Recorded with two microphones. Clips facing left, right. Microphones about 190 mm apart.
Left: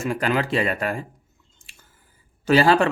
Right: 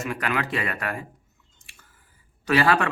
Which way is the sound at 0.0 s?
30° left (ahead or behind).